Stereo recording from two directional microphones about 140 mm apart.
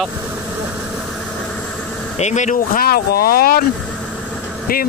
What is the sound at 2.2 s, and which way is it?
Speech, 60° left (ahead or behind).